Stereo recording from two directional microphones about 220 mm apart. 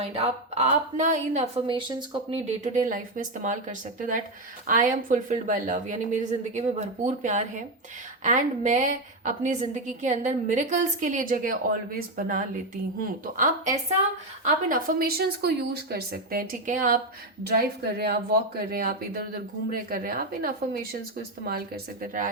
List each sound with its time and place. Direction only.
0.0 s speech: 30° right (ahead or behind)
2.7 s a woman's voice: 35° right (ahead or behind)